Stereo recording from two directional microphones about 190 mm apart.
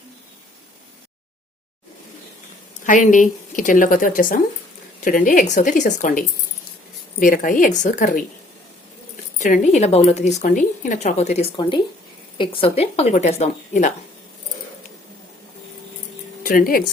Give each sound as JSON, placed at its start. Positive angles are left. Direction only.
{"t": 2.8, "sound": "speech", "side_deg": 45}
{"t": 9.4, "sound": "speech", "side_deg": 40}
{"t": 16.4, "sound": "speech", "side_deg": 50}